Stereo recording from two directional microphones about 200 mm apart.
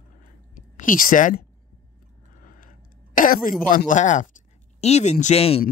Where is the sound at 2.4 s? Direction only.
45° left (ahead or behind).